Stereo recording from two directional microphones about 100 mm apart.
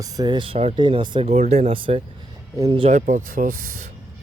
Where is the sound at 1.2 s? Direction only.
90° right; by 2.0 s 65° right (ahead or behind).